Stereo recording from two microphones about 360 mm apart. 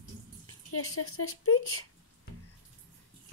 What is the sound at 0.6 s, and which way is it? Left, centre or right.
Speech, left.